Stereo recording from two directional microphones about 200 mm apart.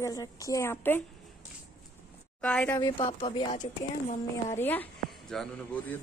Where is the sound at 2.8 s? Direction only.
20° left (ahead or behind).